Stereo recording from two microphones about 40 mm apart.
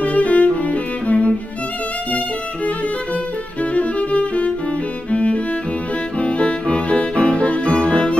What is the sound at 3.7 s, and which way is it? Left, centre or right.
Violin, left.